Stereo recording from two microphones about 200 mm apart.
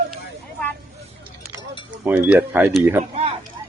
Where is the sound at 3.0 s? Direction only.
35° right (ahead or behind).